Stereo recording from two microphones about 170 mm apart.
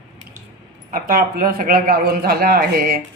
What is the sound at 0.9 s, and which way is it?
A man's voice, 60° right (ahead or behind).